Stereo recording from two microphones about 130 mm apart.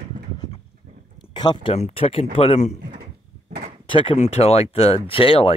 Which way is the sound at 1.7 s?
50° left (ahead or behind).